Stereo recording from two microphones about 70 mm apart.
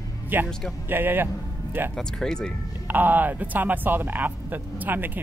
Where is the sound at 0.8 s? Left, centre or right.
Right.